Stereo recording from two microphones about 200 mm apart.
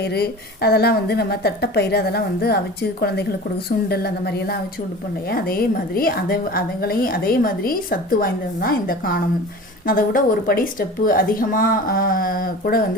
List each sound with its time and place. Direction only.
0.0 s a woman's voice: 55° left (ahead or behind)
3.8 s a woman's voice: 50° left (ahead or behind)